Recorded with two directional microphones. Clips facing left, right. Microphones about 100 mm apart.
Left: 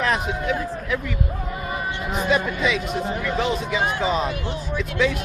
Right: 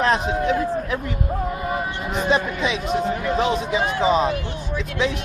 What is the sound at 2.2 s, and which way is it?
Speech, 25° right (ahead or behind).